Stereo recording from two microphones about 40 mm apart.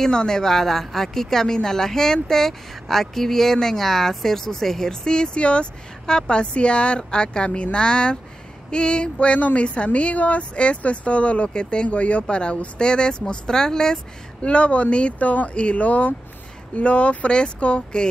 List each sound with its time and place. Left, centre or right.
0.0 s speech: centre
5.0 s a woman's voice: left
14.4 s a woman's voice: left